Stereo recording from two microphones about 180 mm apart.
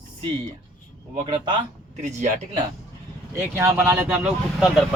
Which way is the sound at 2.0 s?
40° right (ahead or behind).